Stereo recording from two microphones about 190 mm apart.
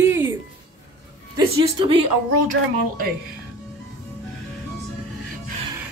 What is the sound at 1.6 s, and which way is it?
Speech, 25° right (ahead or behind).